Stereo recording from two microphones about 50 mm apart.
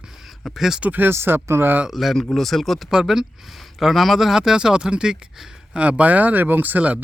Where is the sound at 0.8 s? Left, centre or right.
Right.